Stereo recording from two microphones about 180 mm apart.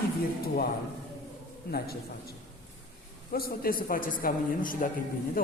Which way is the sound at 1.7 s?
60° left (ahead or behind).